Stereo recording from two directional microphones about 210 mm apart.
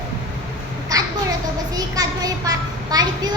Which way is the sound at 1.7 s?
15° right (ahead or behind).